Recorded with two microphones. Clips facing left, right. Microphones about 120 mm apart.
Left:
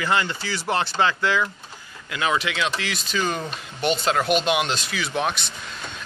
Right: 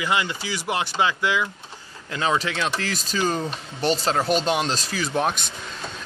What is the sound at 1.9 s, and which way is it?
Speech, 30° right (ahead or behind).